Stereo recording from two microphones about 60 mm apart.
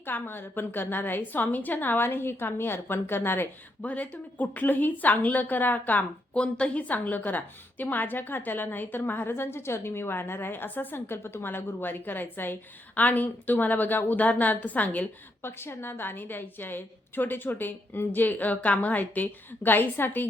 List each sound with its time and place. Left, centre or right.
0.0 s a woman's voice: left
3.8 s a woman's voice: left
15.4 s a woman's voice: left